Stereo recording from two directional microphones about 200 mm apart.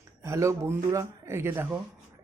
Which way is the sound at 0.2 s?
15° right (ahead or behind).